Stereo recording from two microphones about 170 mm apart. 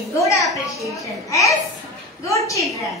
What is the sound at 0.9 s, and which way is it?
A woman's voice, 20° left (ahead or behind).